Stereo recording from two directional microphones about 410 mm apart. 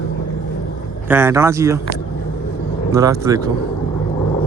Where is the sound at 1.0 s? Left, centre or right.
Centre.